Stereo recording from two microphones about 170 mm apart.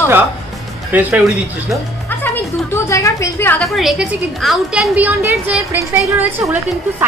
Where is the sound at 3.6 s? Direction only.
Centre (ahead or behind).